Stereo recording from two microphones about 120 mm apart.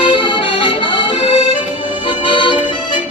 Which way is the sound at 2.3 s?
45° left (ahead or behind).